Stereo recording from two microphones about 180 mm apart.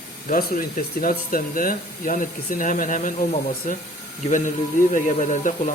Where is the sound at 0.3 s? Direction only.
45° left (ahead or behind).